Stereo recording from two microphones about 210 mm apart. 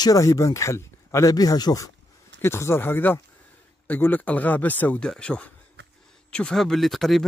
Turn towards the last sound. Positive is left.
turn(degrees=0)  # may be behind; listen again after turning